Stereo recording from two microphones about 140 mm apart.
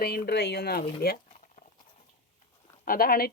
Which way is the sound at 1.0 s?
60° left (ahead or behind).